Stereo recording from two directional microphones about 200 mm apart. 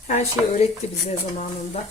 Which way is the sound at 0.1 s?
35° left (ahead or behind).